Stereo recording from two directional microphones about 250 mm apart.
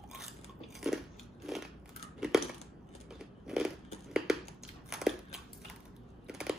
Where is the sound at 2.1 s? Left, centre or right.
Centre.